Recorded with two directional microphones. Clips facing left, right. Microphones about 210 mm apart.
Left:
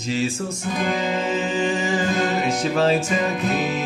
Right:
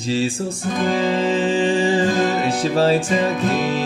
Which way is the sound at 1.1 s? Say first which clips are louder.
Right 5 dB; 30° right (ahead or behind).